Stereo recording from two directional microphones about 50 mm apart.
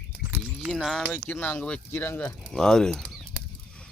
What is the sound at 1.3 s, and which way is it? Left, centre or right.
Speech, left.